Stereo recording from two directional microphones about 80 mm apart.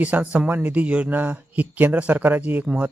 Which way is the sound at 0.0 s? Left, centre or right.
Centre.